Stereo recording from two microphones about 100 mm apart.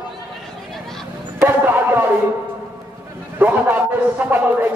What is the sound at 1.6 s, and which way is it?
Music, 20° right (ahead or behind).